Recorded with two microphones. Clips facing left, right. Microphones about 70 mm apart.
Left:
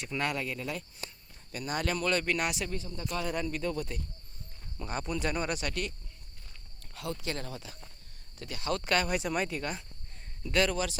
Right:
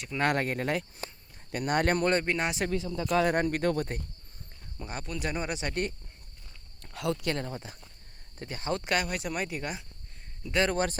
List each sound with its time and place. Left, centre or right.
0.2 s speech: right
2.1 s speech: right
2.6 s speech: right
4.9 s speech: centre
5.3 s speech: centre
6.9 s speech: right
7.3 s speech: right
8.8 s speech: centre
9.0 s speech: centre; by 10.7 s right
10.7 s speech: right